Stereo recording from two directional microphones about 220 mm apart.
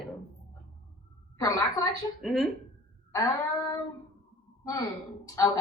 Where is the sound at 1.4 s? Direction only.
15° left (ahead or behind).